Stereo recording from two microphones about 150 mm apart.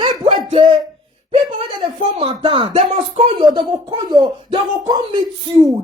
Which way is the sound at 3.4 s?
30° right (ahead or behind).